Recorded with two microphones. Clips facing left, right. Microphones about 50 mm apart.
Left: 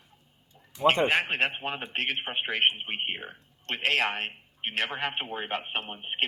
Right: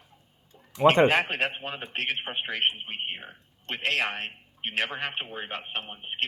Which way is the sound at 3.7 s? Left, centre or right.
Centre.